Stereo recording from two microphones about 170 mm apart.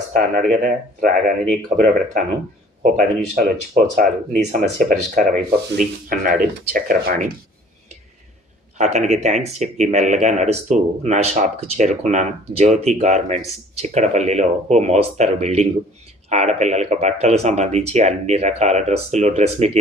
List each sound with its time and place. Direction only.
0.1 s speech: 50° right (ahead or behind)
8.8 s speech: 40° right (ahead or behind)